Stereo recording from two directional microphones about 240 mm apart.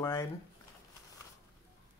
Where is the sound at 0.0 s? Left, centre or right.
Centre.